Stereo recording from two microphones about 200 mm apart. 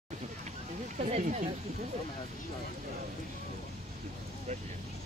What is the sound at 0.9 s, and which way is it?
Speech, 35° right (ahead or behind).